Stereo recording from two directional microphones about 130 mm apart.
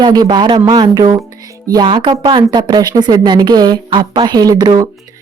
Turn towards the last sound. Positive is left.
turn(degrees=-30)  # may be behind; listen again after turning